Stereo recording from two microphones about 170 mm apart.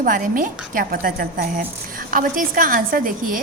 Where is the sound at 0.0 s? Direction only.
55° right (ahead or behind).